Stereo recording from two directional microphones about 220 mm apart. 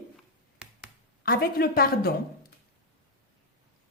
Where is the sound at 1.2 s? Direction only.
40° left (ahead or behind).